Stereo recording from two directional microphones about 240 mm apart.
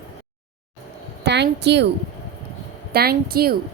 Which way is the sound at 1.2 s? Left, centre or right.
Right.